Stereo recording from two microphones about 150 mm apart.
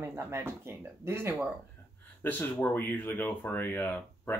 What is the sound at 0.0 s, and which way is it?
Speech, 15° right (ahead or behind).